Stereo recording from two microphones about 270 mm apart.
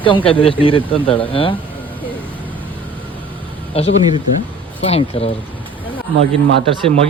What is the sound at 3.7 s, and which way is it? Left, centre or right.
Speech, left.